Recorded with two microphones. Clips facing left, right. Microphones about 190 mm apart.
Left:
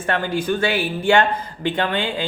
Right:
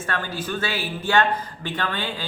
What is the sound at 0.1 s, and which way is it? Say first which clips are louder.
Speech: left 8 dB; 15° left (ahead or behind).